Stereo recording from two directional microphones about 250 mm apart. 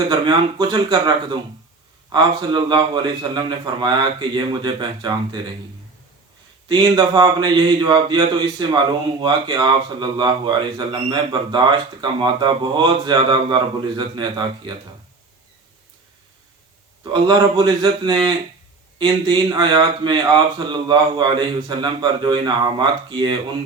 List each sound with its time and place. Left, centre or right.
0.1 s speech: centre
6.7 s speech: centre
17.0 s speech: centre